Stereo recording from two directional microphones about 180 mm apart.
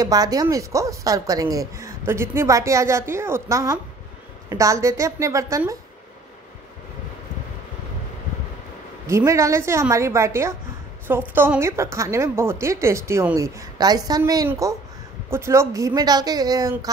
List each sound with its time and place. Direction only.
0.0 s a woman's voice: 20° right (ahead or behind)
9.0 s a woman's voice: 15° right (ahead or behind)